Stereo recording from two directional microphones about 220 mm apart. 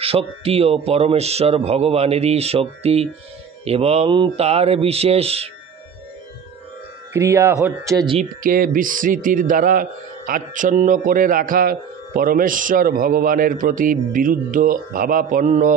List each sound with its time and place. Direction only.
0.0 s speech: 25° right (ahead or behind)
7.2 s a man's voice: 15° right (ahead or behind)
8.4 s a man's voice: 40° right (ahead or behind)